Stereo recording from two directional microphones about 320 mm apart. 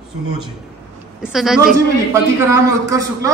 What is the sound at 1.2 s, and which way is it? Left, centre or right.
A woman's voice, centre.